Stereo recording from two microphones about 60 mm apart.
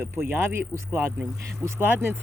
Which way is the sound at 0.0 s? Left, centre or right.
Right.